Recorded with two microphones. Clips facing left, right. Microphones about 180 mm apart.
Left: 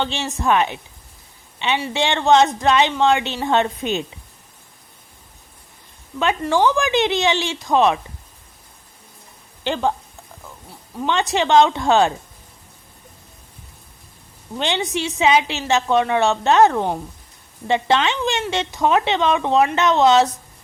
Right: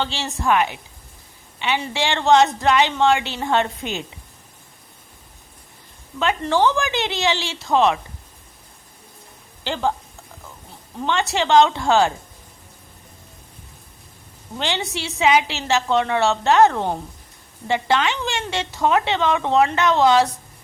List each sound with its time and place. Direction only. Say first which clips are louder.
0.0 s a woman's voice: left 2 dB; 20° left (ahead or behind)
6.1 s a woman's voice: left 1 dB; 15° left (ahead or behind)
9.6 s a woman's voice: left 2 dB; 20° left (ahead or behind)
11.0 s a woman's voice: left 2 dB; 20° left (ahead or behind)
14.6 s a woman's voice: left 3 dB; 20° left (ahead or behind)
17.7 s a woman's voice: left 2 dB; 25° left (ahead or behind)